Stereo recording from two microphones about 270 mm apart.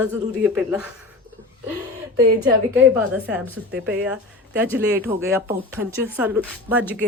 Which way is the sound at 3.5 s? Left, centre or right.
Centre.